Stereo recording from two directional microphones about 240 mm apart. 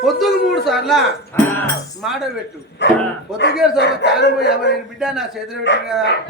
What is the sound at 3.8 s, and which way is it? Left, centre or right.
Speech, left.